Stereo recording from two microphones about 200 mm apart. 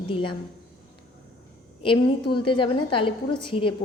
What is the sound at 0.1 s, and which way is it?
Speech, 25° left (ahead or behind).